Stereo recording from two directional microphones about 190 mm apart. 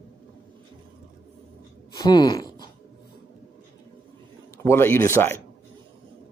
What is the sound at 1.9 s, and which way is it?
Speech, 20° left (ahead or behind).